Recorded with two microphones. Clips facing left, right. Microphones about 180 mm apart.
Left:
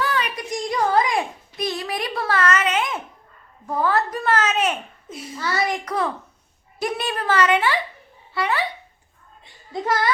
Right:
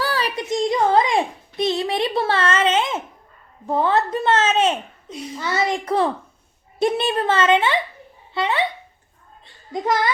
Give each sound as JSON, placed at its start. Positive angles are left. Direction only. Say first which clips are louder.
{"t": 0.0, "sound": "a child's voice", "louder": "right 1 dB", "side_deg": -35}
{"t": 9.7, "sound": "a woman's voice", "louder": "right 2 dB", "side_deg": -20}